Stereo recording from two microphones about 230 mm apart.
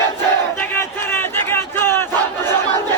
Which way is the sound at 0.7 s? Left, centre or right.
Centre.